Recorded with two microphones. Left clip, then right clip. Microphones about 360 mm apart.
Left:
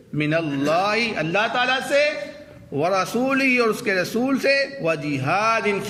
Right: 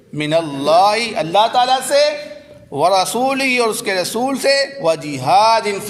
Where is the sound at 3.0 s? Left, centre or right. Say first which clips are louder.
Right 5 dB; centre.